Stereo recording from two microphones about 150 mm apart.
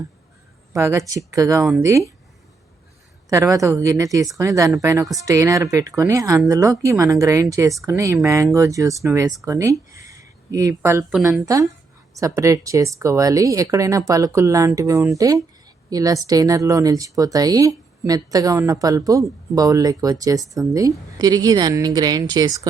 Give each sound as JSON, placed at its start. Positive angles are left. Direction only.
{"t": 0.7, "sound": "speech", "side_deg": -20}
{"t": 3.2, "sound": "speech", "side_deg": -25}